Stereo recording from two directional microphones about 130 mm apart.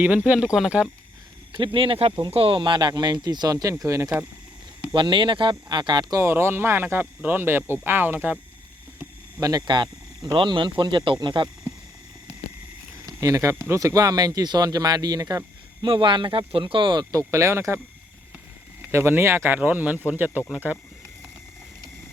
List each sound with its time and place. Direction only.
0.5 s speech: 5° right (ahead or behind)
1.5 s speech: 40° right (ahead or behind)
4.9 s speech: 35° right (ahead or behind); by 8.4 s 10° right (ahead or behind)
9.4 s speech: 30° right (ahead or behind)
13.1 s speech: 25° right (ahead or behind)
18.8 s speech: 20° right (ahead or behind)